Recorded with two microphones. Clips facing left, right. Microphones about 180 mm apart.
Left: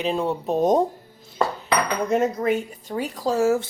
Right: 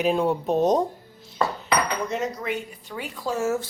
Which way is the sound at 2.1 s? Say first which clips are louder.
Left 7 dB; 50° left (ahead or behind).